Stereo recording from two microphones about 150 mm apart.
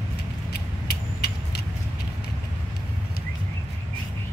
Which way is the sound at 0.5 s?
90° left.